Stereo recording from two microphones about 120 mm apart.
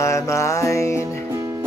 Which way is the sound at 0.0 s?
25° left (ahead or behind).